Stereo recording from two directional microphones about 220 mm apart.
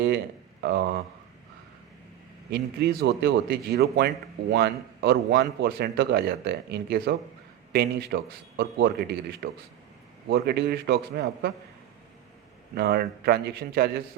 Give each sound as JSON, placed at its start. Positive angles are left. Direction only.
{"t": 0.6, "sound": "speech", "side_deg": -50}
{"t": 2.5, "sound": "a man's voice", "side_deg": -45}
{"t": 12.7, "sound": "a man's voice", "side_deg": -45}